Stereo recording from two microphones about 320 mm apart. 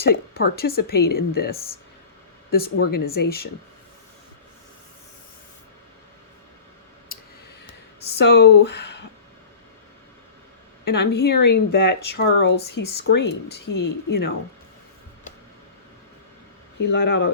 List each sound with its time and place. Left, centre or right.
0.0 s a woman's voice: left
7.1 s a sound: left
8.2 s speech: left
10.8 s speech: left
12.5 s speech: left
13.0 s speech: left
16.8 s speech: left